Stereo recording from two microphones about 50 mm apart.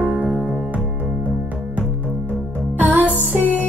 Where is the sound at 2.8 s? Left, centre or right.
Right.